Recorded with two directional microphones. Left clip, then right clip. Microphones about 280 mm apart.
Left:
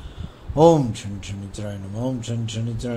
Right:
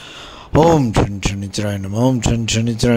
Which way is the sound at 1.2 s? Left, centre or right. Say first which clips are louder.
Right 12 dB; right.